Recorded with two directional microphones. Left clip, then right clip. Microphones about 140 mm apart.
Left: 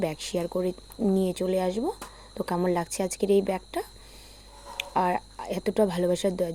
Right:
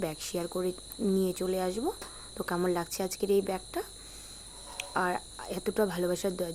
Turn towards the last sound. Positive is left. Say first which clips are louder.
# left 6 dB
turn(degrees=15)  # may be behind; listen again after turning